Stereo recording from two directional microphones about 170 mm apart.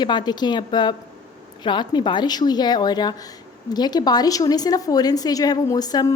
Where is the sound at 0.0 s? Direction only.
25° left (ahead or behind).